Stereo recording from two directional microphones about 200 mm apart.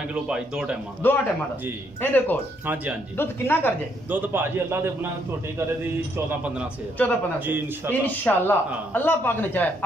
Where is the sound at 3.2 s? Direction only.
10° left (ahead or behind).